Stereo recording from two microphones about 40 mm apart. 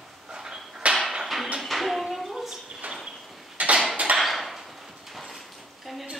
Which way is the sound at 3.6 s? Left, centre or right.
Right.